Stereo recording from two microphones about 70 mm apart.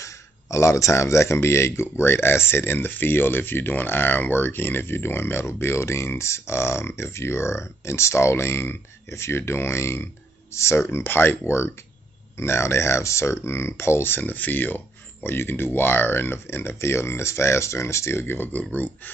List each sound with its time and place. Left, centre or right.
0.0 s speech: left